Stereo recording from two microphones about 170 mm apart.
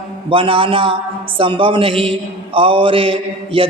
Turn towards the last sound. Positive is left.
turn(degrees=-35)  # may be behind; listen again after turning